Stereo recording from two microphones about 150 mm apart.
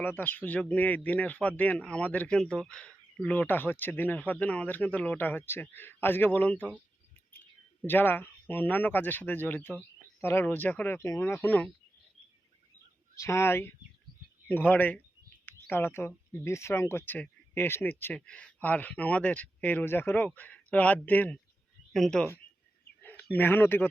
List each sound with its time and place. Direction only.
0.0 s speech: 10° left (ahead or behind)
7.9 s speech: 15° left (ahead or behind)
13.1 s speech: 20° left (ahead or behind); by 22.3 s centre (ahead or behind)
23.3 s speech: 10° left (ahead or behind)